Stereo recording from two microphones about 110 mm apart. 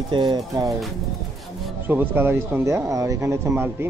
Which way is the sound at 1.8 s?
15° right (ahead or behind).